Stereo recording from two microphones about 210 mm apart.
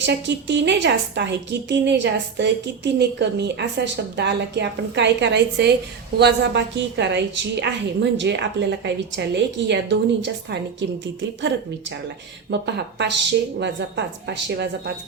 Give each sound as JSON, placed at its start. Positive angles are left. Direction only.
{"t": 0.0, "sound": "a woman's voice", "side_deg": -55}